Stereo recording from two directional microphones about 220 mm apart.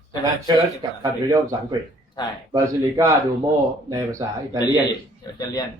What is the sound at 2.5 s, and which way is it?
Speech, 15° right (ahead or behind).